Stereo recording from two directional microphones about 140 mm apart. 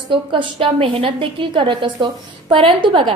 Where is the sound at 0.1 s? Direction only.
35° right (ahead or behind).